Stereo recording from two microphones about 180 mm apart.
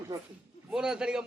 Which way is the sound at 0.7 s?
5° right (ahead or behind).